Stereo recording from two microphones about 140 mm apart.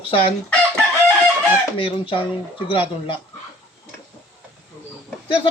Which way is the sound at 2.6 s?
35° left (ahead or behind).